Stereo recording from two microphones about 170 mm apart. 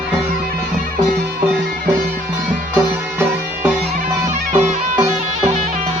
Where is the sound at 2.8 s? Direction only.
15° right (ahead or behind).